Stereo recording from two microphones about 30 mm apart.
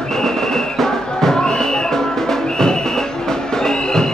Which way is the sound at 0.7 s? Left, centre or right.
Centre.